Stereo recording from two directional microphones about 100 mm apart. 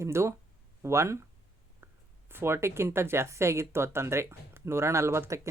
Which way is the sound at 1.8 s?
20° right (ahead or behind).